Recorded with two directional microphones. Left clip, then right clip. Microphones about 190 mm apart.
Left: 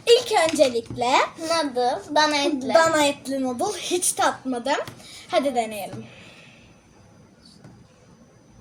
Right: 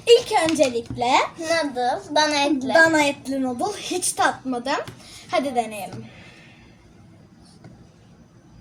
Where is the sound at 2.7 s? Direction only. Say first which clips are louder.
Right 1 dB; 25° left (ahead or behind).